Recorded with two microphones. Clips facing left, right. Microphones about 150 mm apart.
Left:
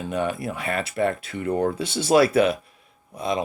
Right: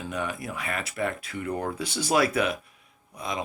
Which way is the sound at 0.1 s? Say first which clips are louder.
Left 7 dB; 25° left (ahead or behind).